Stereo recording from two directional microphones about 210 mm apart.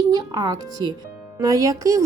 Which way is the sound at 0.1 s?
20° right (ahead or behind).